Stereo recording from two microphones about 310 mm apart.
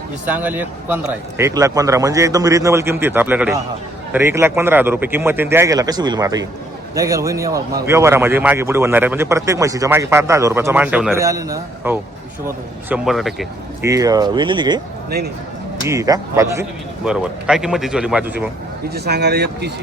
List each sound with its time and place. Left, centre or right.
0.3 s a man's voice: centre
13.9 s a man's voice: centre
15.9 s a man's voice: centre
18.9 s speech: right